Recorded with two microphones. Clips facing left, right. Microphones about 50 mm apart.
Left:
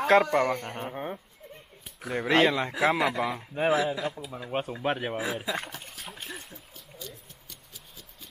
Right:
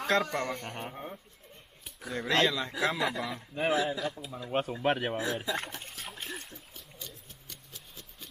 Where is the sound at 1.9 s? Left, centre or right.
Centre.